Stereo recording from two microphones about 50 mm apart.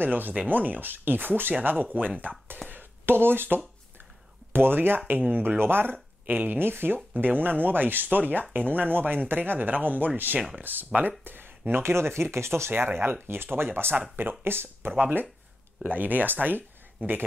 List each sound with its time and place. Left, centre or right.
0.0 s speech: right
2.7 s a sound: right
4.5 s speech: right
12.7 s speech: right
14.9 s speech: right